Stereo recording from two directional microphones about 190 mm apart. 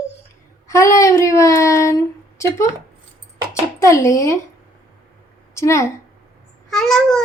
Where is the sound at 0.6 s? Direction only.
15° left (ahead or behind).